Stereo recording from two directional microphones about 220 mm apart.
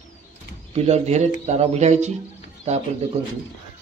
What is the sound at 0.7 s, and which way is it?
Speech, 30° right (ahead or behind).